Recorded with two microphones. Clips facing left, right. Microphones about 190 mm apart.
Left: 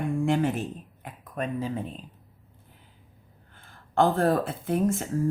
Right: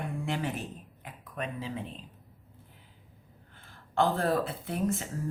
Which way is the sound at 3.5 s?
50° left (ahead or behind).